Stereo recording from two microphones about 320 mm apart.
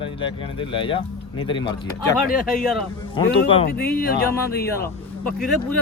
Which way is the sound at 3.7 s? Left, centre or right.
Left.